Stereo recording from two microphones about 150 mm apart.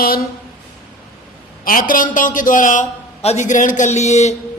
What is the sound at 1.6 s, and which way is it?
A man's voice, 65° left (ahead or behind).